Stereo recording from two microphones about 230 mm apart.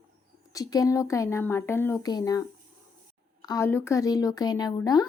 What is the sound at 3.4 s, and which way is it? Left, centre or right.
Speech, centre.